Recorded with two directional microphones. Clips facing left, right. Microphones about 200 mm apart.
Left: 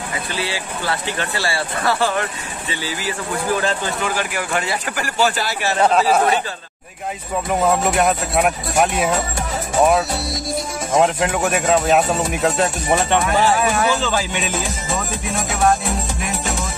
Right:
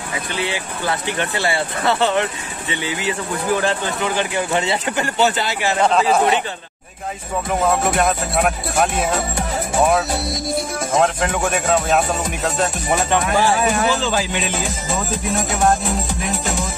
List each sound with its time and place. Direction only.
0.4 s speech: 20° right (ahead or behind)
5.8 s speech: 5° left (ahead or behind)
8.0 s speech: 10° left (ahead or behind)
11.0 s speech: 5° left (ahead or behind)